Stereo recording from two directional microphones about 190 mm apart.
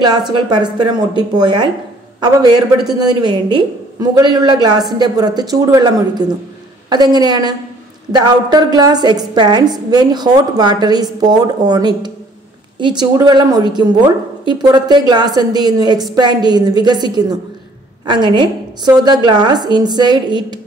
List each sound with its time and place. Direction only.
0.5 s a woman's voice: 25° right (ahead or behind)